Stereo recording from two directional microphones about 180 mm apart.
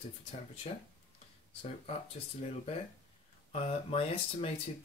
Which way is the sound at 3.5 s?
30° left (ahead or behind).